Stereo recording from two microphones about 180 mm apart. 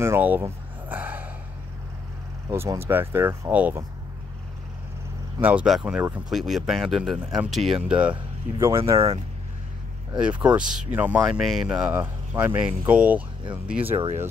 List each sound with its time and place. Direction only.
0.0 s a sound: 10° right (ahead or behind)
2.5 s speech: 15° right (ahead or behind)
5.4 s speech: 10° right (ahead or behind)
10.1 s speech: 5° right (ahead or behind)
13.8 s speech: 35° right (ahead or behind)